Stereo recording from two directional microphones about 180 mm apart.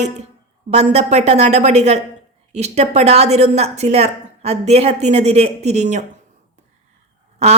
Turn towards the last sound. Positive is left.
turn(degrees=-35)  # may be behind; listen again after turning